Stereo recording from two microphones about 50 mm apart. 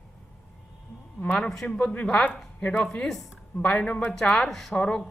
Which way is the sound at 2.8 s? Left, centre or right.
Centre.